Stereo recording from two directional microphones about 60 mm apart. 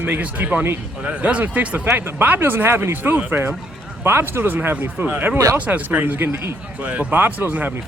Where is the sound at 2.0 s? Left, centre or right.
Right.